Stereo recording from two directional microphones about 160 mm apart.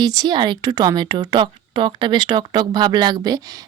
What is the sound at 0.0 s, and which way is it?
A woman's voice, 25° right (ahead or behind).